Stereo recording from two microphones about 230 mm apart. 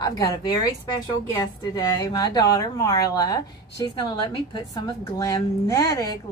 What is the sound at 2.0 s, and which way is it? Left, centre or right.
Speech, centre.